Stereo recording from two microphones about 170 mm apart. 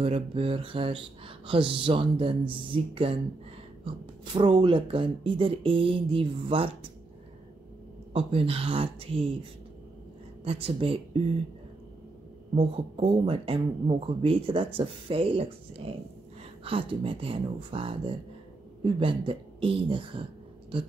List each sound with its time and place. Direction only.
0.0 s speech: 35° right (ahead or behind)
8.1 s speech: 35° right (ahead or behind)
10.4 s speech: 35° right (ahead or behind)
12.5 s speech: 35° right (ahead or behind)